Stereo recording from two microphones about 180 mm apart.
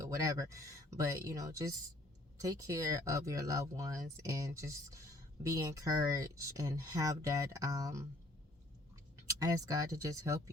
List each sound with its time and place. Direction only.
0.1 s speech: 15° right (ahead or behind)
9.4 s speech: 20° right (ahead or behind)